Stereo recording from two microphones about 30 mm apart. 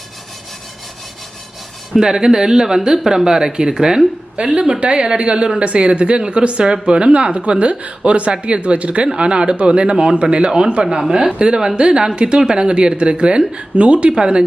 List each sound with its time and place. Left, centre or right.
1.9 s speech: centre
4.4 s speech: right
4.8 s speech: right